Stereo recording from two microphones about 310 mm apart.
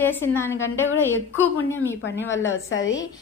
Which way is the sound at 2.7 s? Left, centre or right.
Left.